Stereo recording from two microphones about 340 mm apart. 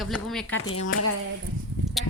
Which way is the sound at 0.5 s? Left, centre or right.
Left.